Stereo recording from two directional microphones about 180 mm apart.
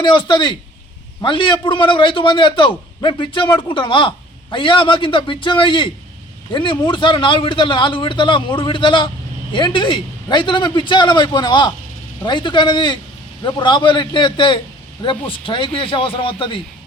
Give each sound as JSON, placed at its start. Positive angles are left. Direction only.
{"t": 0.0, "sound": "a man's voice", "side_deg": 25}